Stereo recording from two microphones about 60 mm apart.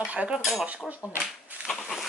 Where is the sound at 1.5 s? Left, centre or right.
Right.